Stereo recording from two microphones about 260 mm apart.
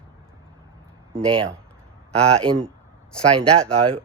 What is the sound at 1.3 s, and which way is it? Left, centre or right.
Speech, centre.